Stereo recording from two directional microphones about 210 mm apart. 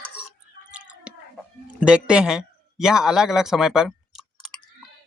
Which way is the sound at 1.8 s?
5° right (ahead or behind).